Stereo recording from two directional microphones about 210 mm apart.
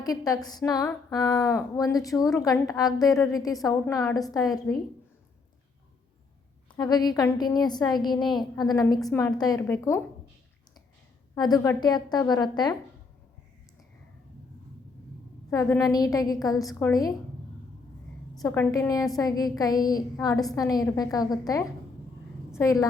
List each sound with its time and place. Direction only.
0.0 s speech: 15° left (ahead or behind)
6.7 s a woman's voice: 20° left (ahead or behind)
11.3 s a woman's voice: 20° left (ahead or behind)
15.4 s speech: 15° left (ahead or behind)
18.3 s speech: 10° left (ahead or behind)